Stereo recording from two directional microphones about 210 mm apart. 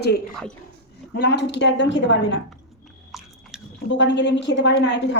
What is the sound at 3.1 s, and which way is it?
Biting, centre (ahead or behind).